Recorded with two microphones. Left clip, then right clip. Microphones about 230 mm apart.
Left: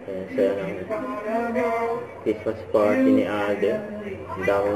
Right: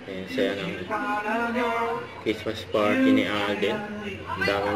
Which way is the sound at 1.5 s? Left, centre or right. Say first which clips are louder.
Left 2 dB; centre.